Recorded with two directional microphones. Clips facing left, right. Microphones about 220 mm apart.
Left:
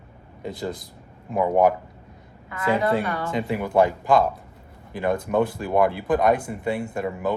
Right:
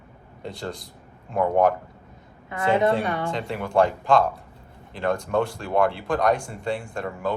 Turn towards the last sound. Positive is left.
turn(degrees=5)  # may be behind; listen again after turning